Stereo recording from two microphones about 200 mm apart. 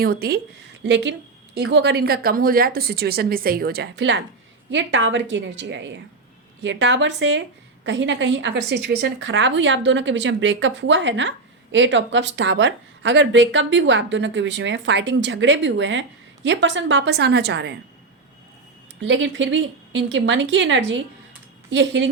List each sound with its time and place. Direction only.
0.0 s a woman's voice: 50° right (ahead or behind)
0.9 s a woman's voice: 65° right (ahead or behind)
18.9 s speech: 70° right (ahead or behind)